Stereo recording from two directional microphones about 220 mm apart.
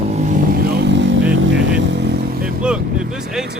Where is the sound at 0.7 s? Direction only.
50° right (ahead or behind).